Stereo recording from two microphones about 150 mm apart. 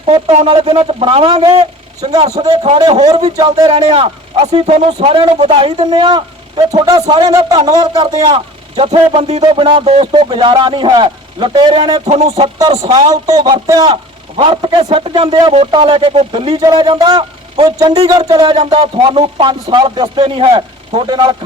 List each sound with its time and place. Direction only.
0.0 s a man's voice: 40° right (ahead or behind); by 3.7 s 25° right (ahead or behind)
3.7 s a man's voice: 40° right (ahead or behind)
9.4 s speech: 30° right (ahead or behind)
12.0 s a sound: 45° right (ahead or behind)
12.8 s a man's voice: 30° right (ahead or behind)
18.3 s speech: 35° right (ahead or behind)